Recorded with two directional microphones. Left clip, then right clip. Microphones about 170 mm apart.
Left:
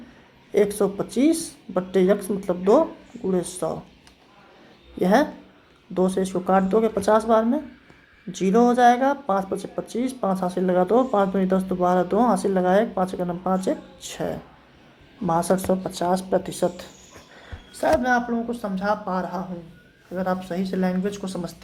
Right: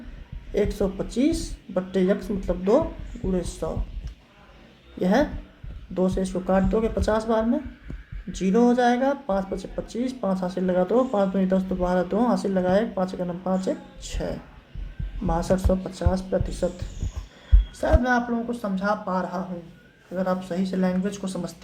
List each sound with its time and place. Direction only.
0.5 s speech: 25° left (ahead or behind)
4.9 s speech: 25° left (ahead or behind)